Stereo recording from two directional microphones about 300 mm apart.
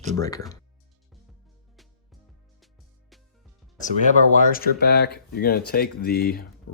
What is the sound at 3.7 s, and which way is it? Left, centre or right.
Speech, left.